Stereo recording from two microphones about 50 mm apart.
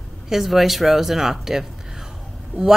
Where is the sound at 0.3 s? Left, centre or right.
Centre.